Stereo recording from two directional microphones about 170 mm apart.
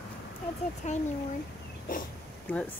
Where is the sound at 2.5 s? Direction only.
10° left (ahead or behind).